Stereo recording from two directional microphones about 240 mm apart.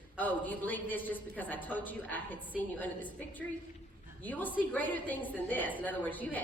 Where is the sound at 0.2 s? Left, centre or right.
Centre.